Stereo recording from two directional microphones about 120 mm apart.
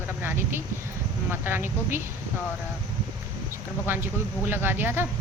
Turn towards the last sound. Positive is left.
turn(degrees=-20)  # may be behind; listen again after turning